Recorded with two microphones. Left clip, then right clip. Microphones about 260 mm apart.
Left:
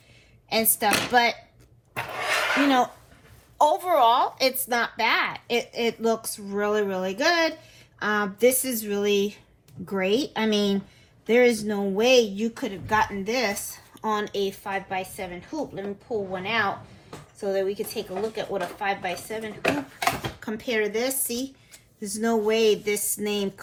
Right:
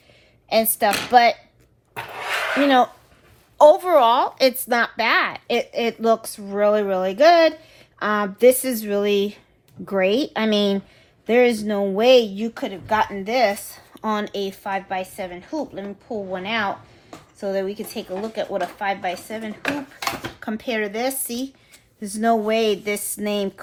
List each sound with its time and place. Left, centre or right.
0.4 s a woman's voice: right
2.6 s a woman's voice: right